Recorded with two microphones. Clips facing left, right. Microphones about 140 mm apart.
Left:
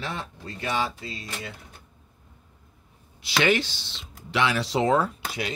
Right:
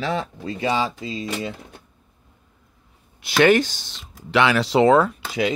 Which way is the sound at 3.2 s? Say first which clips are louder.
Right 7 dB; 50° right (ahead or behind).